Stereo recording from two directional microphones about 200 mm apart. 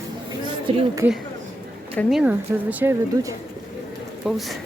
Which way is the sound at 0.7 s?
30° right (ahead or behind).